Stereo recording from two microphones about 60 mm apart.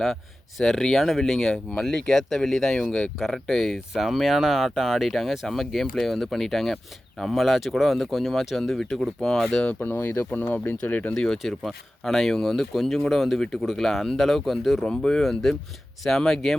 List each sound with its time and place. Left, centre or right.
0.6 s speech: centre
9.8 s speech: left
11.1 s speech: centre